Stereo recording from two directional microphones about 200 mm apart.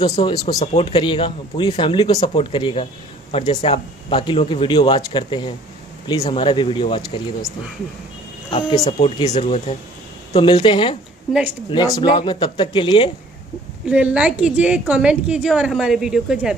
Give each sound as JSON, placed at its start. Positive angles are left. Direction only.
{"t": 0.2, "sound": "speech", "side_deg": 20}
{"t": 9.3, "sound": "speech", "side_deg": 35}
{"t": 13.8, "sound": "a woman's voice", "side_deg": -5}